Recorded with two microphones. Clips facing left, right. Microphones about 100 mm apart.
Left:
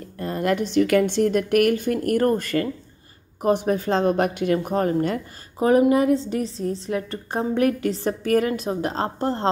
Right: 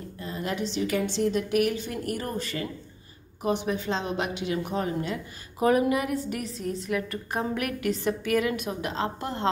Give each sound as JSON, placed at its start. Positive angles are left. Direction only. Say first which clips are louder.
{"t": 0.2, "sound": "speech", "louder": "left 8 dB", "side_deg": 55}
{"t": 3.4, "sound": "speech", "louder": "left 6 dB", "side_deg": 45}
{"t": 5.6, "sound": "a woman's voice", "louder": "left 6 dB", "side_deg": 30}